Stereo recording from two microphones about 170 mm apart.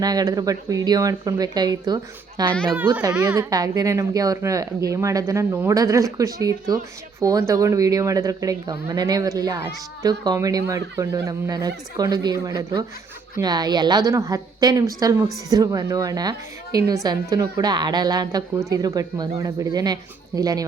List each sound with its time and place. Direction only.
0.0 s speech: 20° right (ahead or behind)
2.5 s speech: 5° left (ahead or behind)
3.2 s speech: 20° right (ahead or behind)